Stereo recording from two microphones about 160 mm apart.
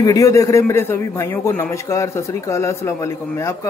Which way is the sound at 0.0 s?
20° left (ahead or behind).